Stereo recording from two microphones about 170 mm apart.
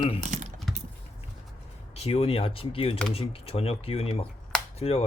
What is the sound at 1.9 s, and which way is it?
Speech, 35° left (ahead or behind).